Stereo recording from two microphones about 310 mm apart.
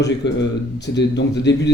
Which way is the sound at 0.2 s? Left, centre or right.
Left.